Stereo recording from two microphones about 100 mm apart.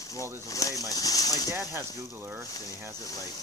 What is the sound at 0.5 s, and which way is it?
Speech, 35° left (ahead or behind).